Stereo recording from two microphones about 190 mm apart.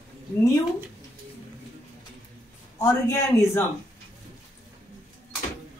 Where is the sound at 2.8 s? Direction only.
15° left (ahead or behind).